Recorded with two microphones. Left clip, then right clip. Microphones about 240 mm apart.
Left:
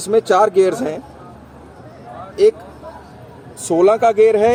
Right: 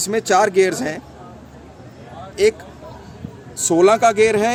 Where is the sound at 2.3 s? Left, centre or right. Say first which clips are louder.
Left 3 dB; right.